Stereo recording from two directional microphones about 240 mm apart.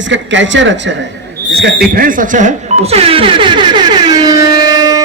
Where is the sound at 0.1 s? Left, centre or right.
Right.